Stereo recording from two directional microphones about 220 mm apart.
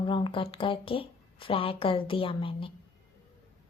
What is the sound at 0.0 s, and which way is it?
A woman's voice, 20° left (ahead or behind).